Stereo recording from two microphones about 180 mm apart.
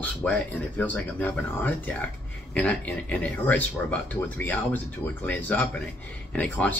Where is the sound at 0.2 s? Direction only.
10° left (ahead or behind).